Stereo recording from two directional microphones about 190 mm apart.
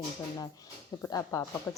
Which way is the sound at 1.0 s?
15° left (ahead or behind).